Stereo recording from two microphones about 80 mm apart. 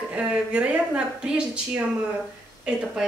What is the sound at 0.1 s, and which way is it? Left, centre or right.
A woman's voice, centre.